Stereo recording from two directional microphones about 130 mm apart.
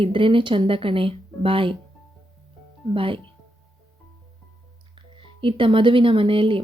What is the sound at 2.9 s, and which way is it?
Speech, 45° right (ahead or behind).